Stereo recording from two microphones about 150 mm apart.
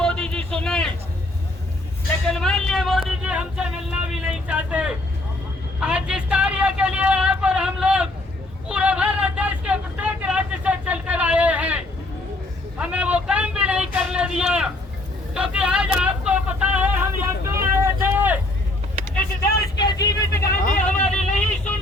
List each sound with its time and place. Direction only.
0.0 s a sound: 5° left (ahead or behind)
2.2 s a sound: 5° left (ahead or behind)
8.7 s vehicle: 10° right (ahead or behind)
12.8 s vehicle: 10° right (ahead or behind)
19.8 s vehicle: 25° left (ahead or behind)
20.8 s vehicle: 5° left (ahead or behind)